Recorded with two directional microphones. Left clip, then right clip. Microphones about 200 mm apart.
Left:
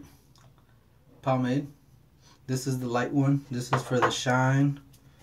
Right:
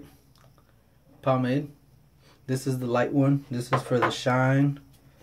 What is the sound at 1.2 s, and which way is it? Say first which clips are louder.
Speech: right 2 dB; 15° right (ahead or behind).